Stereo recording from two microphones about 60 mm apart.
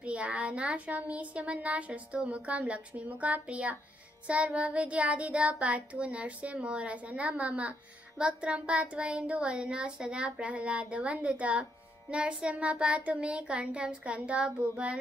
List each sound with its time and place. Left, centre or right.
0.0 s a child's voice: right